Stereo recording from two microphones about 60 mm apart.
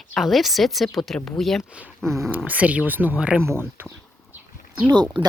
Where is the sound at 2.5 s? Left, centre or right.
Right.